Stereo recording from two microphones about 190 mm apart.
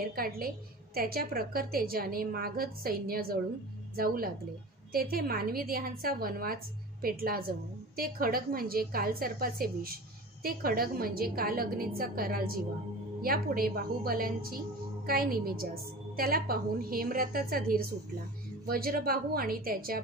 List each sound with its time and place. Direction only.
0.0 s a woman's voice: 50° right (ahead or behind)